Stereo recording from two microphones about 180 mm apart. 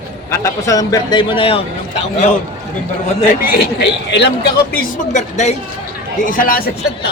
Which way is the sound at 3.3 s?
55° left (ahead or behind).